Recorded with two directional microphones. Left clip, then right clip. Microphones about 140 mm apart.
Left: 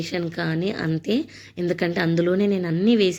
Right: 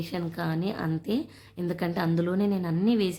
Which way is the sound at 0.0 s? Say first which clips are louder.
Left 6 dB; 10° left (ahead or behind).